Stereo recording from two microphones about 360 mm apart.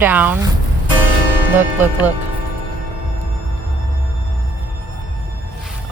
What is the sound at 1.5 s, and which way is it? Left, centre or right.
Speech, centre.